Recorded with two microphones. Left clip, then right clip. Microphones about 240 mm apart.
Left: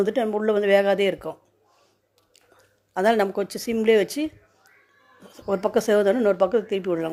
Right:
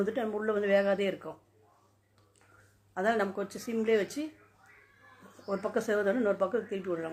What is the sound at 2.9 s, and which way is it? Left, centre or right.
A woman's voice, left.